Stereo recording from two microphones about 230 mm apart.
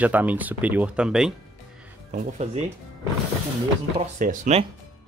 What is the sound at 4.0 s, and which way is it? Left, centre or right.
Speech, right.